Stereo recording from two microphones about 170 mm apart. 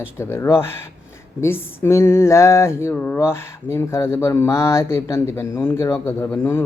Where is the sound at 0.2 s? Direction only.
15° left (ahead or behind).